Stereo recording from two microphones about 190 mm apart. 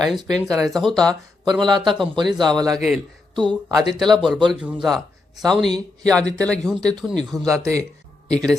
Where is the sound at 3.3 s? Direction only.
25° right (ahead or behind).